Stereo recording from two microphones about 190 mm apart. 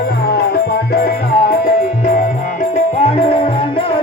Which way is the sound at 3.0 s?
30° left (ahead or behind).